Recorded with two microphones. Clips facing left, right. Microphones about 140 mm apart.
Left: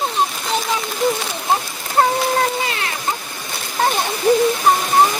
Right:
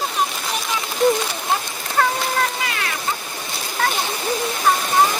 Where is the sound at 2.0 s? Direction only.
30° left (ahead or behind).